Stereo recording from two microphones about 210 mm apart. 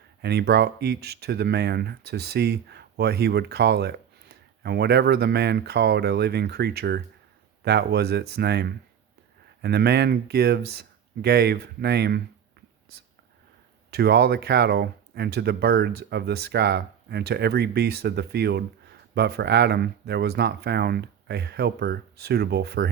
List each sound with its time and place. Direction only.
0.2 s speech: 50° right (ahead or behind)
13.9 s speech: 50° right (ahead or behind)